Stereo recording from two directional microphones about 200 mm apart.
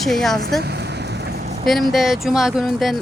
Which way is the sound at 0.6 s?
55° right (ahead or behind).